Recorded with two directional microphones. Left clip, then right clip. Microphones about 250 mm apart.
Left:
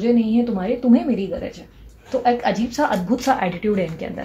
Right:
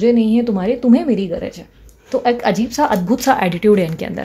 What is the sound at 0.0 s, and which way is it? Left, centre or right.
A woman's voice, right.